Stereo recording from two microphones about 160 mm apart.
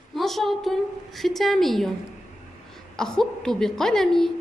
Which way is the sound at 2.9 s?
5° left (ahead or behind).